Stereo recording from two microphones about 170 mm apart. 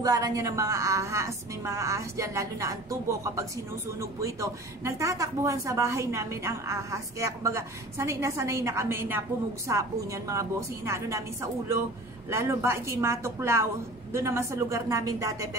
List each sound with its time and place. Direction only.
0.0 s a woman's voice: 20° right (ahead or behind)